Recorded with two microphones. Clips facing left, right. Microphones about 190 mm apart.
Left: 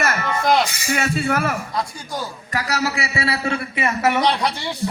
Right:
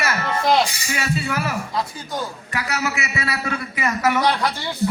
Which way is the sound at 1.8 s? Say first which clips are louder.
Even; centre (ahead or behind).